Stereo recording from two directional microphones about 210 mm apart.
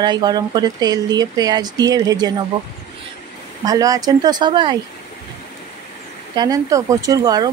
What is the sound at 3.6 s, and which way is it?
Speech, 15° right (ahead or behind).